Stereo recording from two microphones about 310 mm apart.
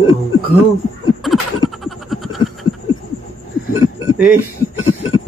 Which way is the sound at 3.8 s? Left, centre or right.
Left.